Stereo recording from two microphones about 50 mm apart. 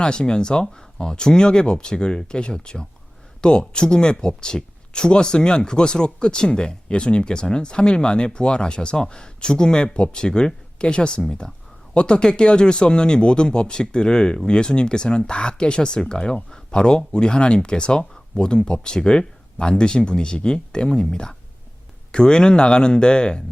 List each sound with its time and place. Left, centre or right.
0.0 s speech: centre